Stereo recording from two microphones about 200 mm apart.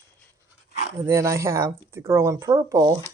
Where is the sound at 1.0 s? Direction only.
15° right (ahead or behind).